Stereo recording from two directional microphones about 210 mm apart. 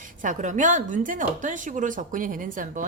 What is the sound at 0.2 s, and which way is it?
A woman's voice, 35° right (ahead or behind).